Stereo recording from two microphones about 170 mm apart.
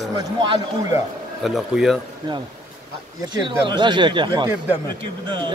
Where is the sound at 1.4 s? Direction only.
Centre (ahead or behind).